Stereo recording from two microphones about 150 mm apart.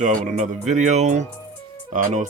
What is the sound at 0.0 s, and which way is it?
Speech, 55° right (ahead or behind).